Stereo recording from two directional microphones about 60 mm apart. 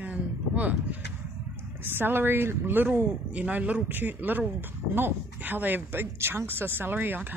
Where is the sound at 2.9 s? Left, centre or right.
Right.